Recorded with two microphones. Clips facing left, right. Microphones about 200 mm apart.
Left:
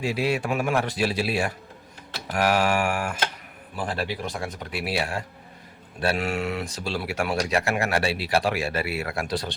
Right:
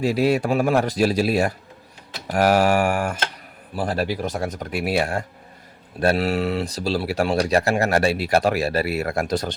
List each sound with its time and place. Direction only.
0.0 s speech: 40° right (ahead or behind)